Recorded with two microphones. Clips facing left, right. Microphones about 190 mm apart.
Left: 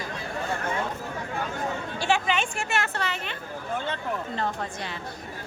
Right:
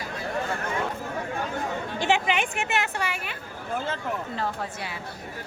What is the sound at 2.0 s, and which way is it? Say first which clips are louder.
A woman's voice: right 1 dB; 20° right (ahead or behind).